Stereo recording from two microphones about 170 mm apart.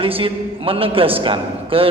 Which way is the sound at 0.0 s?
30° right (ahead or behind).